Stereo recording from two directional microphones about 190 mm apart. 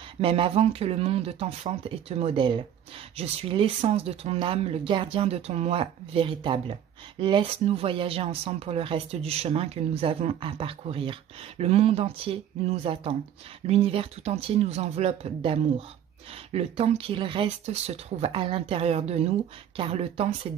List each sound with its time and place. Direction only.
0.2 s speech: 30° right (ahead or behind)